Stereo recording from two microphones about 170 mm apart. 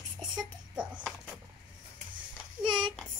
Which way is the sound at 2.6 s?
5° right (ahead or behind).